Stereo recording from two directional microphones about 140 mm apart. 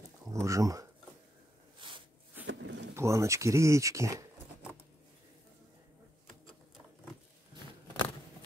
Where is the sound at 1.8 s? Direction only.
35° right (ahead or behind).